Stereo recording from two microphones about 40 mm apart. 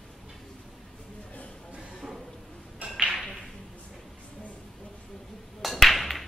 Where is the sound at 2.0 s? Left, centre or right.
Centre.